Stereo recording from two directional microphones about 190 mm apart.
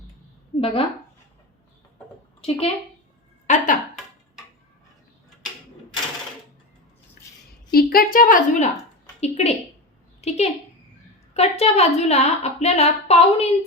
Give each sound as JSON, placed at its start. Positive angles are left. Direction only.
{"t": 0.6, "sound": "speech", "side_deg": 30}
{"t": 2.4, "sound": "a woman's voice", "side_deg": 30}
{"t": 3.4, "sound": "a sound", "side_deg": 40}
{"t": 7.7, "sound": "a woman's voice", "side_deg": 55}